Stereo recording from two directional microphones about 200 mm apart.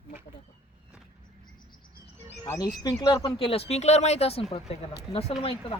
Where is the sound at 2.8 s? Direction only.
20° left (ahead or behind).